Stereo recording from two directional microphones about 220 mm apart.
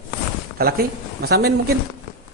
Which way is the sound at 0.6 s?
45° right (ahead or behind).